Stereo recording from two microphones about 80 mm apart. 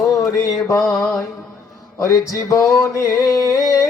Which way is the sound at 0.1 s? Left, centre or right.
Left.